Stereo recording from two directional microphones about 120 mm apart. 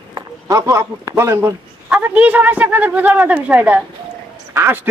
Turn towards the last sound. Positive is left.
turn(degrees=-15)  # may be behind; listen again after turning